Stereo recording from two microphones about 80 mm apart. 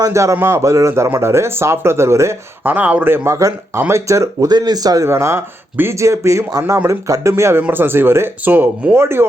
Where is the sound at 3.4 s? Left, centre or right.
Right.